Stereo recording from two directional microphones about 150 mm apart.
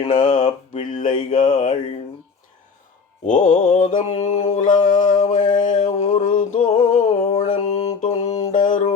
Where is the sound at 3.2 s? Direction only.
55° left (ahead or behind).